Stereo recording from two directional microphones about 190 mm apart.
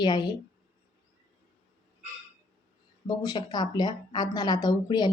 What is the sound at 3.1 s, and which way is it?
A woman's voice, 20° left (ahead or behind).